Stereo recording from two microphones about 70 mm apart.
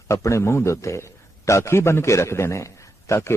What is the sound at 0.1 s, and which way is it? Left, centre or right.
A man's voice, left.